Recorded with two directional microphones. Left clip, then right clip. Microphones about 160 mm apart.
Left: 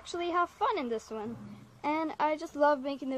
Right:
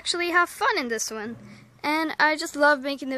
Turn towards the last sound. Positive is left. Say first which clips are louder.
# right 7 dB
turn(degrees=-20)  # may be behind; listen again after turning